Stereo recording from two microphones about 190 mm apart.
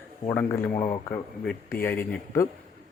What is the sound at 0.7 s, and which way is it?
Speech, 40° left (ahead or behind).